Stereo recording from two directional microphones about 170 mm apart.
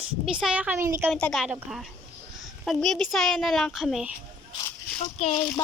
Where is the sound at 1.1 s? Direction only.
5° left (ahead or behind).